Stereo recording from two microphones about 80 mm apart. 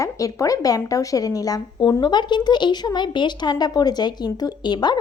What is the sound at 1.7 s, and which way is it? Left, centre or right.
A woman's voice, left.